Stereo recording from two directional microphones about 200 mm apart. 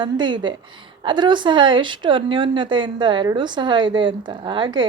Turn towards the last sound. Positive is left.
turn(degrees=-20)  # may be behind; listen again after turning